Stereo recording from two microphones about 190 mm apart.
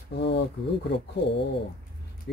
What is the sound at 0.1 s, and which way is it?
Speech, 65° left (ahead or behind).